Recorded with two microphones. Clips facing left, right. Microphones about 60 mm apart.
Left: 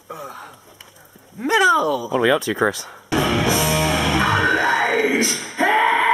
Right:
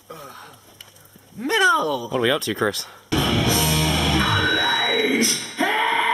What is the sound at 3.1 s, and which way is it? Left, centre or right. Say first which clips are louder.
Music: left 2 dB; left.